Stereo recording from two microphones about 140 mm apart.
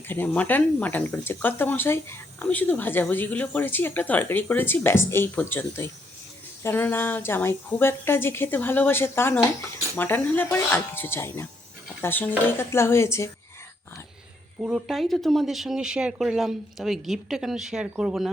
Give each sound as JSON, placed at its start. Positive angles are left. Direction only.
{"t": 0.1, "sound": "speech", "side_deg": 15}
{"t": 14.6, "sound": "speech", "side_deg": 0}